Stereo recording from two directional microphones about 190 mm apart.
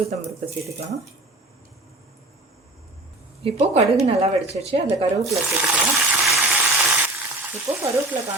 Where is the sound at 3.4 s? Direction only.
35° right (ahead or behind).